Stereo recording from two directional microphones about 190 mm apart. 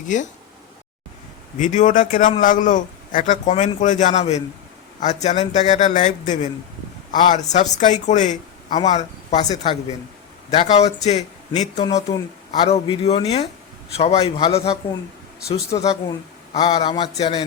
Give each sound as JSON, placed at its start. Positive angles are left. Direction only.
{"t": 0.1, "sound": "speech", "side_deg": 40}
{"t": 1.5, "sound": "a man's voice", "side_deg": 40}